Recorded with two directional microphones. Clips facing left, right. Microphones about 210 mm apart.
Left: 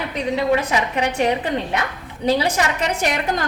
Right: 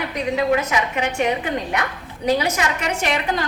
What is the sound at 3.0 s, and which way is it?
Speech, 45° left (ahead or behind).